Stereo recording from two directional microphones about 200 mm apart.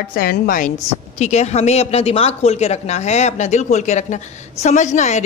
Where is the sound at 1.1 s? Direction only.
35° left (ahead or behind).